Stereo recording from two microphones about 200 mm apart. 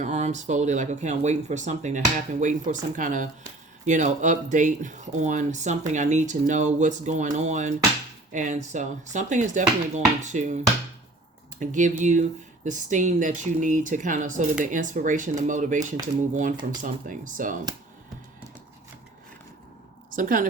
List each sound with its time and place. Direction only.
0.0 s speech: 35° right (ahead or behind)
11.6 s speech: 40° right (ahead or behind)
20.1 s speech: 40° right (ahead or behind)